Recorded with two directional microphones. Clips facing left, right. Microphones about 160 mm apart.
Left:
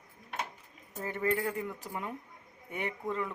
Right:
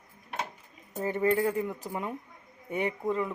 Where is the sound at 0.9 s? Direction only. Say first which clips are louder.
Right 5 dB; 20° right (ahead or behind).